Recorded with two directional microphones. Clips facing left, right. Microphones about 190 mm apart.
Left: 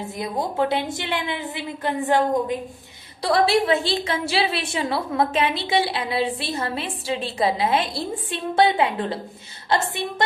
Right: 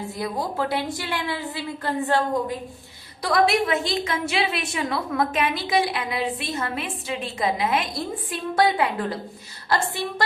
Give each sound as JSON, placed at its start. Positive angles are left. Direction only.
{"t": 0.2, "sound": "a woman's voice", "side_deg": 20}
{"t": 3.2, "sound": "a woman's voice", "side_deg": 30}